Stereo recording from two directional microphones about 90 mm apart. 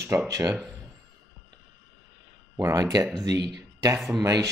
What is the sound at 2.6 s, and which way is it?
Speech, 35° right (ahead or behind).